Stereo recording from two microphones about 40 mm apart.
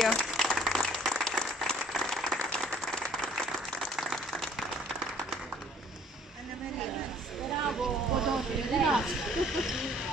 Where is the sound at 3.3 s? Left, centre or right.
Centre.